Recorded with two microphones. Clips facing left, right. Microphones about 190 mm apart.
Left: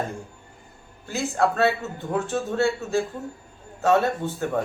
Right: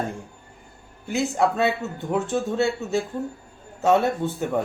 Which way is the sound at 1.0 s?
15° right (ahead or behind).